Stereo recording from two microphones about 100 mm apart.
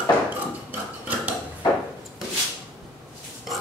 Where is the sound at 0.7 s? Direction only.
15° right (ahead or behind).